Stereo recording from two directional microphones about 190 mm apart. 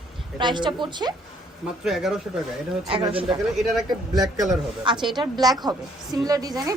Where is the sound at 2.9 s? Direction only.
30° right (ahead or behind).